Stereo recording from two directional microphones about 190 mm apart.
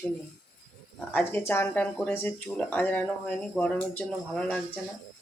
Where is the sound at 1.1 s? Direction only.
10° left (ahead or behind).